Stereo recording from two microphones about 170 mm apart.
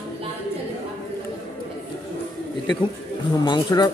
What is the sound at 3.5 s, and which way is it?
Speech, 25° left (ahead or behind).